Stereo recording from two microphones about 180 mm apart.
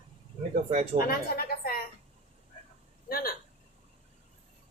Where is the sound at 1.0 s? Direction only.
55° left (ahead or behind).